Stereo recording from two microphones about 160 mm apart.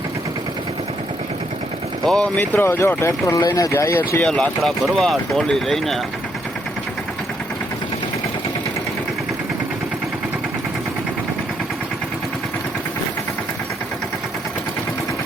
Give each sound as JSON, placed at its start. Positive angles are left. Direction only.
{"t": 2.0, "sound": "speech", "side_deg": 5}
{"t": 4.2, "sound": "speech", "side_deg": 5}